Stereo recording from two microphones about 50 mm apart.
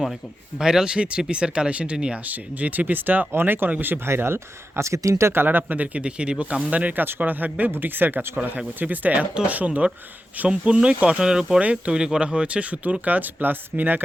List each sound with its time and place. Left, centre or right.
0.6 s speech: centre
2.2 s speech: right
4.1 s speech: right
4.8 s speech: right
5.3 s speech: right
8.4 s speech: right; by 11.6 s centre
11.6 s speech: right